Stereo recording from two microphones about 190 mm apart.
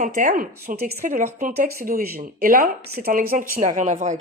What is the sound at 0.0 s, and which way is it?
Speech, 40° right (ahead or behind).